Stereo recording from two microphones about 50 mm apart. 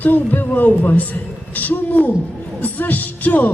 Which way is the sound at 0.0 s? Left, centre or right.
Left.